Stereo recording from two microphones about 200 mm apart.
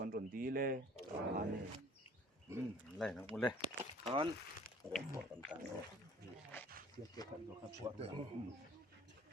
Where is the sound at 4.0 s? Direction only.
25° right (ahead or behind).